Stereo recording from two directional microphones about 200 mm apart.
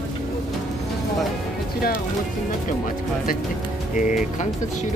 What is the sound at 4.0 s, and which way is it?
Speech, 40° left (ahead or behind).